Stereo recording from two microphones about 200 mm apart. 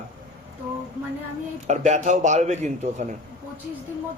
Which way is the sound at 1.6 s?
35° right (ahead or behind).